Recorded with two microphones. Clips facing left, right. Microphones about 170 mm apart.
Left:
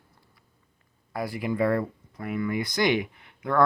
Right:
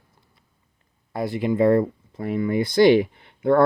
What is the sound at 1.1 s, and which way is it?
Speech, 25° right (ahead or behind).